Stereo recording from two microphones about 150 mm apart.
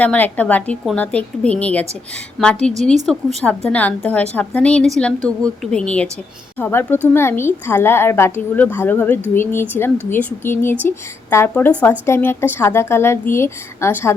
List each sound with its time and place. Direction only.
0.0 s a woman's voice: 10° left (ahead or behind)